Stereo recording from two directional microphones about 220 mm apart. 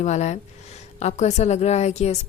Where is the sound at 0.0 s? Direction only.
30° left (ahead or behind).